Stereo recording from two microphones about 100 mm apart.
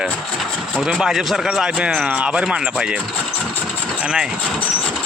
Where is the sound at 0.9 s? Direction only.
5° right (ahead or behind).